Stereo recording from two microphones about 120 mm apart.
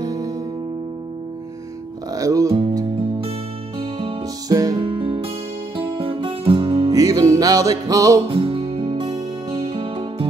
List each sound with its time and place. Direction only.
0.0 s music: 30° right (ahead or behind)
2.1 s speech: 30° right (ahead or behind)
3.0 s music: 50° right (ahead or behind)
4.5 s music: 30° right (ahead or behind)
4.8 s music: 45° right (ahead or behind)
5.8 s guitar: 50° right (ahead or behind)
6.9 s music: 30° right (ahead or behind)
8.3 s guitar: 50° right (ahead or behind)
9.5 s music: 50° right (ahead or behind)